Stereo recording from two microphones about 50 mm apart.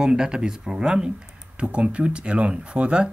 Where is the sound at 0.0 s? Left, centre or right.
Centre.